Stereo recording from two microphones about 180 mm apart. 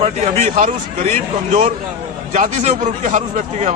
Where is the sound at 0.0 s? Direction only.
40° right (ahead or behind).